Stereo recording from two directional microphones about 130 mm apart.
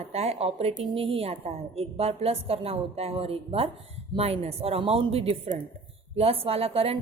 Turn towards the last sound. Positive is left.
turn(degrees=-50)  # may be behind; listen again after turning